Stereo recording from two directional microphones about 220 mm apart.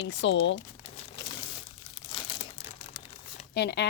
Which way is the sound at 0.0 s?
55° left (ahead or behind).